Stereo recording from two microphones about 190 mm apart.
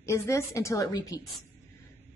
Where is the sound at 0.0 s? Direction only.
15° left (ahead or behind).